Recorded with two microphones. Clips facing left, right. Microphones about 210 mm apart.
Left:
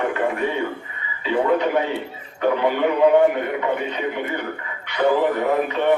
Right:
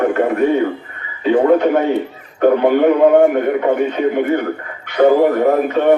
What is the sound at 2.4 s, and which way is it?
A man's voice, 50° right (ahead or behind).